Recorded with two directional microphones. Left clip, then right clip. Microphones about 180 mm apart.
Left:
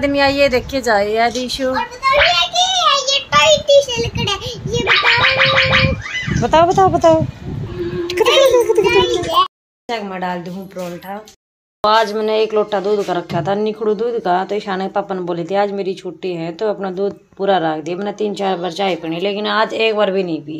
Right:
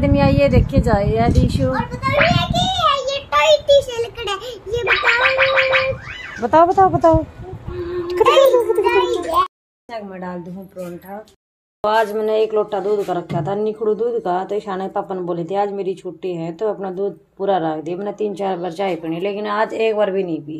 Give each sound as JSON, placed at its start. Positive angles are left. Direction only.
{"t": 0.0, "sound": "speech", "side_deg": 0}
{"t": 1.7, "sound": "a sound", "side_deg": -20}
{"t": 3.0, "sound": "child singing", "side_deg": -55}
{"t": 3.6, "sound": "a sound", "side_deg": -35}
{"t": 6.4, "sound": "speech", "side_deg": 0}
{"t": 8.9, "sound": "a child's voice", "side_deg": -10}
{"t": 11.8, "sound": "speech", "side_deg": 0}